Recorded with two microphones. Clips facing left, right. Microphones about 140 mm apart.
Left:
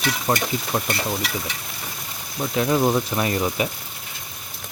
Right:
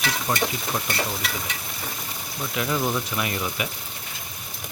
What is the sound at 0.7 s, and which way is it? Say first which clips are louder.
Stir: left 6 dB; 20° left (ahead or behind).